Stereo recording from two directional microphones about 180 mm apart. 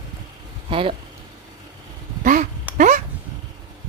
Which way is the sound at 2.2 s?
45° right (ahead or behind).